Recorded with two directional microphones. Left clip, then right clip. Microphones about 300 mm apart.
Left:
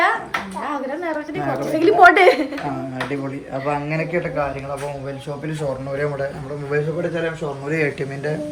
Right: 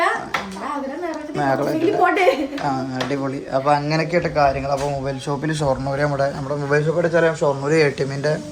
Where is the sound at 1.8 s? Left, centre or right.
Centre.